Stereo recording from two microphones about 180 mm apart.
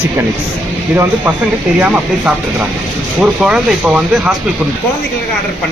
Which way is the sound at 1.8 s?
5° right (ahead or behind).